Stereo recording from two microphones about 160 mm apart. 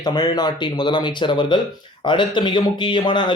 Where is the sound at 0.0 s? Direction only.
25° left (ahead or behind).